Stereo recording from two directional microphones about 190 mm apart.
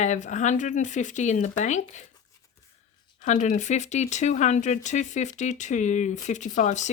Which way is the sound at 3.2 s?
40° left (ahead or behind).